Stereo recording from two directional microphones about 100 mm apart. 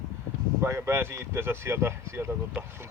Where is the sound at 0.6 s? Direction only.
25° right (ahead or behind).